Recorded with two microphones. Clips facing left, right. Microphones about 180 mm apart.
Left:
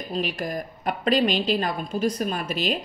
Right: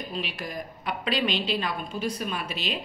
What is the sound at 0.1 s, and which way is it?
Speech, 45° left (ahead or behind).